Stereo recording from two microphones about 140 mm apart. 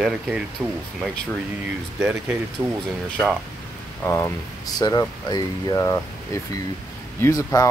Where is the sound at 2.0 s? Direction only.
15° right (ahead or behind).